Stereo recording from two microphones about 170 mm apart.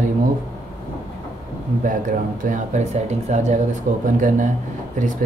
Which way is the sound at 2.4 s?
45° right (ahead or behind).